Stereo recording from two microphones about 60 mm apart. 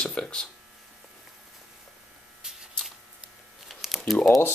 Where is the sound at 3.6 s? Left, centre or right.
Centre.